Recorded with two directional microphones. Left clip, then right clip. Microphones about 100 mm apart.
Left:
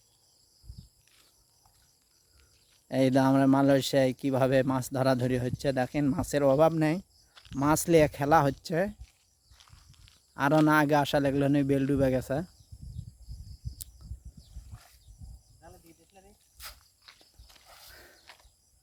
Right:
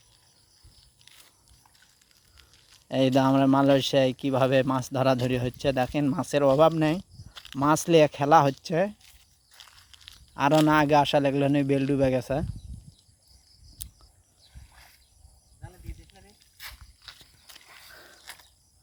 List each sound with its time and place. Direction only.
2.9 s speech: 25° left (ahead or behind)
10.3 s speech: 25° left (ahead or behind)
16.1 s a sound: centre (ahead or behind)
17.9 s mechanisms: 50° left (ahead or behind)